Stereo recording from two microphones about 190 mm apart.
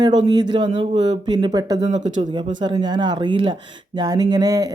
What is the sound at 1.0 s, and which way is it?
Speech, 25° right (ahead or behind).